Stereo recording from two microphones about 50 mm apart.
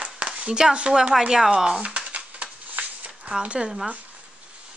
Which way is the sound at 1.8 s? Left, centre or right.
Right.